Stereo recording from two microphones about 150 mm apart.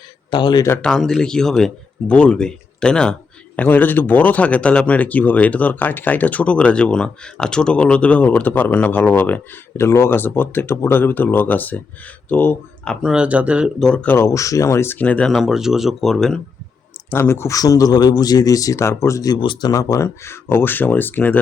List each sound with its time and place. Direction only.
0.3 s speech: 30° left (ahead or behind)
0.7 s speech: 5° left (ahead or behind)
13.0 s speech: 5° right (ahead or behind)
13.8 s speech: 10° left (ahead or behind)
17.1 s speech: 15° left (ahead or behind)